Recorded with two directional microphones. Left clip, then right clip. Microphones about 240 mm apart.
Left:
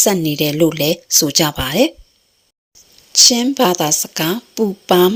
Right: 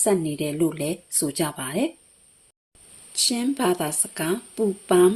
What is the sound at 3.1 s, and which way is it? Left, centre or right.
Speech, left.